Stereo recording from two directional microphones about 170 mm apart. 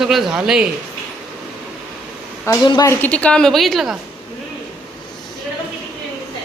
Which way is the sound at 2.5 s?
25° left (ahead or behind).